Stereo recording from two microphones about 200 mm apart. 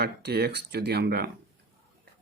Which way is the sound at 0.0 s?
55° right (ahead or behind).